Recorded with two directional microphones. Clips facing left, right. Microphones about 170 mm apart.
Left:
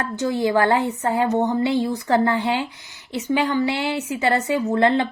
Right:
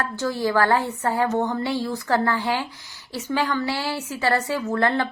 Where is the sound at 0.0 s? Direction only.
20° left (ahead or behind).